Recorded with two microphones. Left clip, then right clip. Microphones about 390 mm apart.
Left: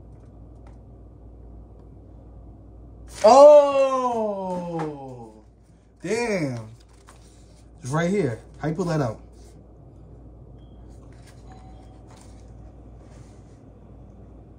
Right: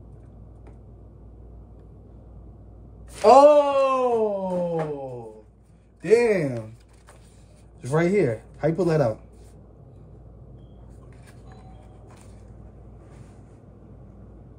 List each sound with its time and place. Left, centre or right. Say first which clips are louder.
3.1 s speech: left 2 dB; centre
7.8 s speech: right 3 dB; centre